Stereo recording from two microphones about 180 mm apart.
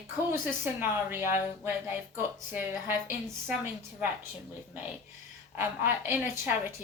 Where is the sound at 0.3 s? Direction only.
10° right (ahead or behind).